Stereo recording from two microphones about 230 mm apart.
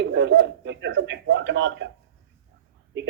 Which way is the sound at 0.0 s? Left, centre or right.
Right.